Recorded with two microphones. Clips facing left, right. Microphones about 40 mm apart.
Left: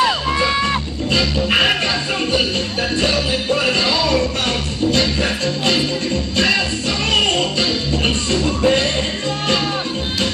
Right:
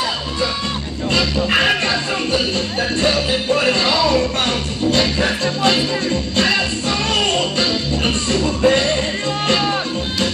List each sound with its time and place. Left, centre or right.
8.0 s music: right